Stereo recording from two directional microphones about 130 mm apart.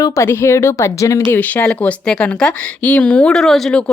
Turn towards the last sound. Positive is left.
turn(degrees=0)  # may be behind; listen again after turning